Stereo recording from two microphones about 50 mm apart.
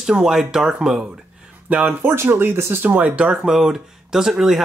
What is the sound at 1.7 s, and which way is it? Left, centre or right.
Speech, right.